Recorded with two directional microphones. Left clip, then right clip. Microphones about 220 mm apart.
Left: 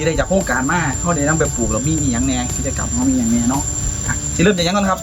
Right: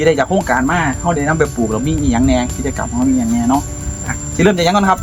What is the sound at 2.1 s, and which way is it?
Speech, 30° right (ahead or behind).